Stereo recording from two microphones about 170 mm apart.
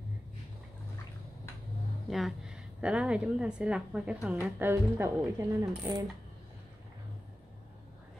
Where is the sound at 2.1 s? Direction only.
Centre (ahead or behind).